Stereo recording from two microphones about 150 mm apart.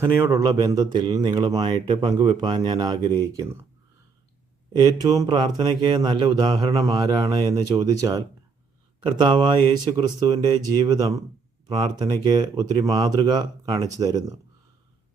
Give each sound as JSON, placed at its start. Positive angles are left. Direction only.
{"t": 0.0, "sound": "speech", "side_deg": -20}
{"t": 4.7, "sound": "speech", "side_deg": -25}
{"t": 12.2, "sound": "speech", "side_deg": -30}